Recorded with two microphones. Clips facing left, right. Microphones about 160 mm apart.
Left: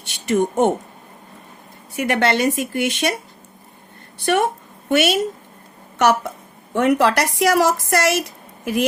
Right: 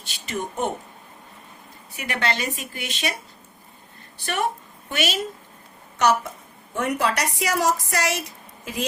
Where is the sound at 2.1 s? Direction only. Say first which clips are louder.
Left 8 dB; 65° left (ahead or behind).